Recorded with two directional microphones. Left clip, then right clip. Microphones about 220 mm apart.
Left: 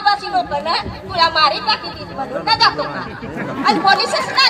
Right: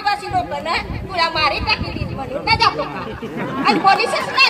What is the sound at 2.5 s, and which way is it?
Speech, 25° right (ahead or behind).